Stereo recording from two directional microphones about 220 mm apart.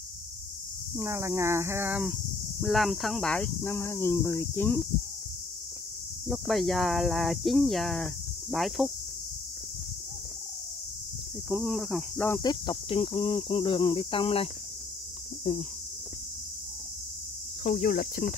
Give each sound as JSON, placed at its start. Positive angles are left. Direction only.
{"t": 0.9, "sound": "speech", "side_deg": -10}
{"t": 6.2, "sound": "speech", "side_deg": 0}
{"t": 11.4, "sound": "speech", "side_deg": -5}
{"t": 12.3, "sound": "speech", "side_deg": 20}
{"t": 17.6, "sound": "speech", "side_deg": 40}